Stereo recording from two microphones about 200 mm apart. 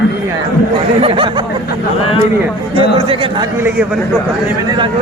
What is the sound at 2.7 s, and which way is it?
Speech, 30° right (ahead or behind).